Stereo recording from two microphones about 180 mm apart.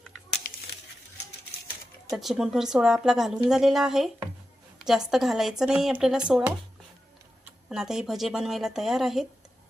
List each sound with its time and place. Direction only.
0.4 s a sound: 50° left (ahead or behind)
2.0 s a woman's voice: centre (ahead or behind)
7.7 s a woman's voice: 5° right (ahead or behind)